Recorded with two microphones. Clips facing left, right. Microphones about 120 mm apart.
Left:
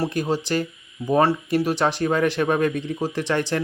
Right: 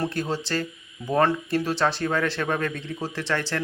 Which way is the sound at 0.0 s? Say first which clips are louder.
Left 4 dB; 15° left (ahead or behind).